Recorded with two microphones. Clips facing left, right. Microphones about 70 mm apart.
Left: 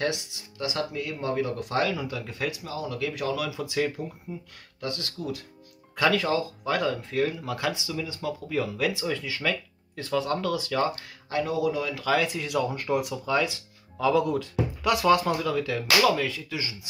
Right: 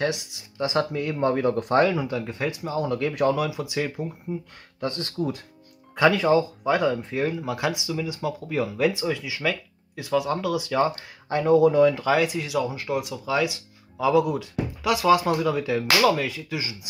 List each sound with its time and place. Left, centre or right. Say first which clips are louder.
0.0 s speech: right 2 dB; right
2.7 s speech: right 6 dB; right
3.3 s speech: right 2 dB; centre
4.3 s speech: right 7 dB; right
9.1 s speech: right 2 dB; centre; by 12.1 s right
12.1 s speech: right 3 dB; centre
15.4 s speech: right 4 dB; centre